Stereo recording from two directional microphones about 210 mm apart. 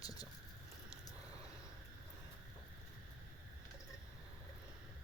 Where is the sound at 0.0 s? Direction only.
15° left (ahead or behind).